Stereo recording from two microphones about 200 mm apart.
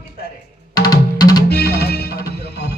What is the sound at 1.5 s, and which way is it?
Music, 55° left (ahead or behind).